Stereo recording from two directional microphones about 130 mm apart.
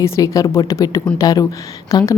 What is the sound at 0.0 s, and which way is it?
A woman's voice, 25° left (ahead or behind).